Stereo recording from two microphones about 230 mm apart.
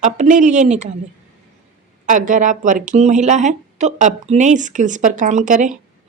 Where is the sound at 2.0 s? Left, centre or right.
Right.